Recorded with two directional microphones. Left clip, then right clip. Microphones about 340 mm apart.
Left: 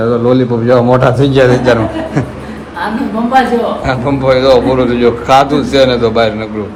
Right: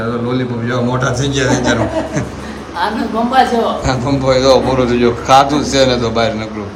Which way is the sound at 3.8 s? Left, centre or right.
Centre.